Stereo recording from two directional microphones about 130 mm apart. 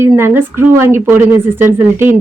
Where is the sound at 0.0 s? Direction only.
20° right (ahead or behind).